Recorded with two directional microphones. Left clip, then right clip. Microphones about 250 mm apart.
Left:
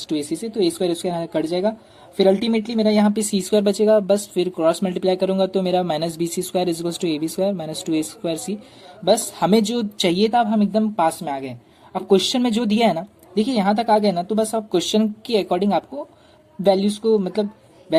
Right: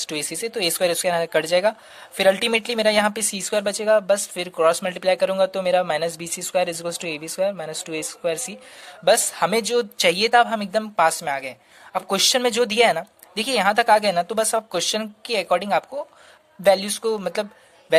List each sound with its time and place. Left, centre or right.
0.0 s speech: right